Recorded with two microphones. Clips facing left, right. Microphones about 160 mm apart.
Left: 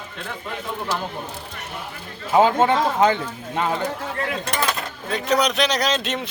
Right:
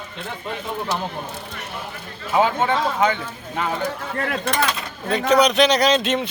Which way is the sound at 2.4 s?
30° left (ahead or behind).